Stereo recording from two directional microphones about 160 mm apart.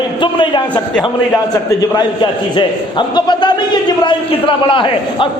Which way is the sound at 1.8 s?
20° left (ahead or behind).